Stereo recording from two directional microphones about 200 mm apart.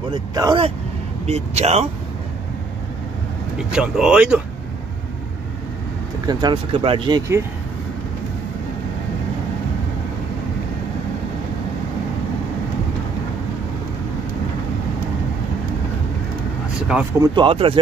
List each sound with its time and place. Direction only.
0.1 s speech: 20° right (ahead or behind)
3.7 s speech: 5° right (ahead or behind)
6.2 s speech: 25° right (ahead or behind)
16.8 s speech: 5° right (ahead or behind)
17.4 s speech: 25° right (ahead or behind)